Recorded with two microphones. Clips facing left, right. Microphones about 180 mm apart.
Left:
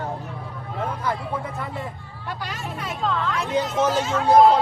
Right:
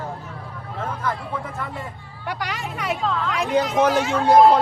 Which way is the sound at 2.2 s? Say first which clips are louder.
Right 4 dB; 85° right.